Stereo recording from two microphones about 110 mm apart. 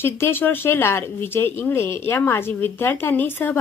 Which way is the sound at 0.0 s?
20° left (ahead or behind).